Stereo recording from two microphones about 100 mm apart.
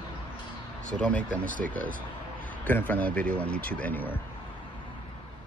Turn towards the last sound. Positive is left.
turn(degrees=20)  # may be behind; listen again after turning